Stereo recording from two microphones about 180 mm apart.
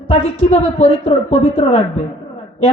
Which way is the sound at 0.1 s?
30° left (ahead or behind).